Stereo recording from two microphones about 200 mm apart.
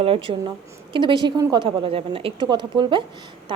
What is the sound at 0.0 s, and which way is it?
A woman's voice, 25° right (ahead or behind).